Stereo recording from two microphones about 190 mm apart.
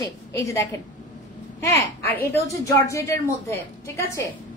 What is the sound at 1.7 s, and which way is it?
A woman's voice, 10° left (ahead or behind).